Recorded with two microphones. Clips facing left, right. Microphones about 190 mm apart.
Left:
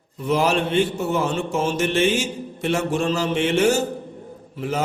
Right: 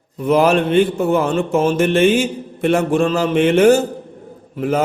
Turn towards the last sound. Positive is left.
turn(degrees=-55)  # may be behind; listen again after turning